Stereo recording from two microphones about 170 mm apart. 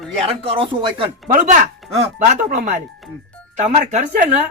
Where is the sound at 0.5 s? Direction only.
30° right (ahead or behind).